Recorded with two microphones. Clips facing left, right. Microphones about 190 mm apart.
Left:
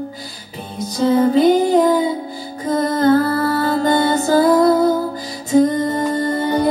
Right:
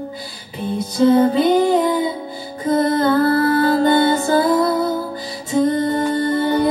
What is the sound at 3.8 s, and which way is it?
Music, 40° left (ahead or behind).